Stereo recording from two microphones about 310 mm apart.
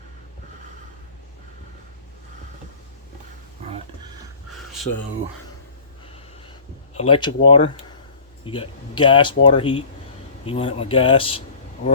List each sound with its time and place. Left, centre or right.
6.9 s speech: centre